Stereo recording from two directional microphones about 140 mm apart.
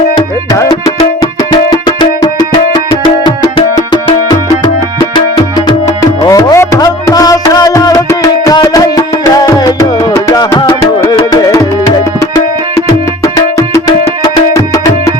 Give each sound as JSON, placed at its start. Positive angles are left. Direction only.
{"t": 0.5, "sound": "music", "side_deg": 20}
{"t": 11.3, "sound": "tabla", "side_deg": 25}
{"t": 13.2, "sound": "music", "side_deg": 25}